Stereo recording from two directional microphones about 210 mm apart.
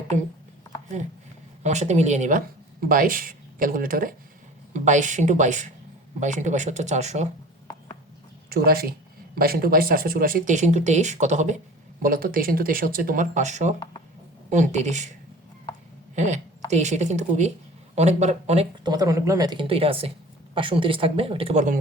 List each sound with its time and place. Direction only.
0.9 s speech: 35° right (ahead or behind)
8.4 s speech: 45° right (ahead or behind)
16.1 s speech: 35° right (ahead or behind)